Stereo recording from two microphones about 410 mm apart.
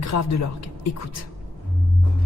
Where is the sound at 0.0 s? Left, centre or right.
Left.